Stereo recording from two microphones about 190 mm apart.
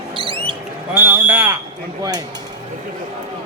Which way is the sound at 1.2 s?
10° right (ahead or behind).